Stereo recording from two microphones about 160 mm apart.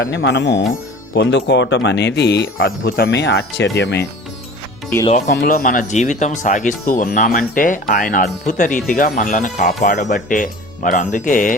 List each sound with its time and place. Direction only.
0.1 s speech: 90° left
5.0 s speech: 50° left (ahead or behind)
5.3 s speech: 70° left (ahead or behind)